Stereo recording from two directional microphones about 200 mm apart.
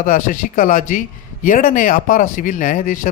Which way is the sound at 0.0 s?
40° left (ahead or behind).